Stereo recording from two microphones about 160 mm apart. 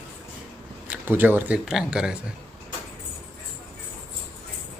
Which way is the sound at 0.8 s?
10° right (ahead or behind).